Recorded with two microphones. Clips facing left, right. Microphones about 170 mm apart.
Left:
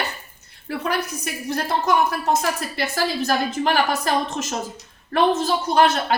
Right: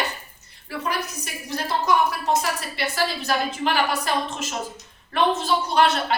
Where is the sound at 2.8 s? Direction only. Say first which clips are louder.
Left 2 dB; 45° left (ahead or behind).